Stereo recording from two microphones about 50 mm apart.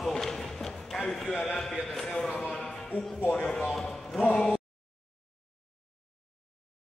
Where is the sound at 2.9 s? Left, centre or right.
Right.